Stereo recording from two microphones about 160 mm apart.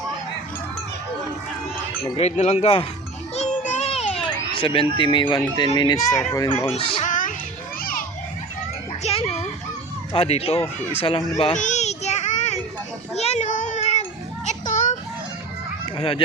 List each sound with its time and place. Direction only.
2.1 s speech: 45° left (ahead or behind)
3.3 s children playing: 45° left (ahead or behind)
5.1 s speech: 30° left (ahead or behind)
7.0 s music: 55° left (ahead or behind)
7.8 s children playing: 65° left (ahead or behind)
9.0 s children playing: 40° left (ahead or behind)
10.2 s speech: 40° left (ahead or behind)
11.5 s a sound: 50° left (ahead or behind)
14.4 s children playing: 50° left (ahead or behind)
16.0 s speech: 35° left (ahead or behind)